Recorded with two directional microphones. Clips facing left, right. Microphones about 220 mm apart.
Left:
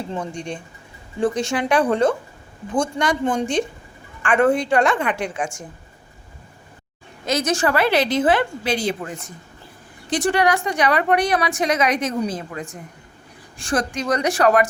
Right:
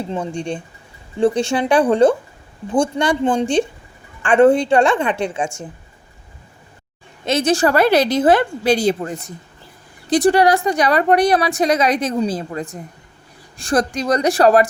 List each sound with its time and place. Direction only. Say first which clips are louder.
0.1 s a woman's voice: right 4 dB; 30° right (ahead or behind)
7.3 s a woman's voice: right 4 dB; 30° right (ahead or behind)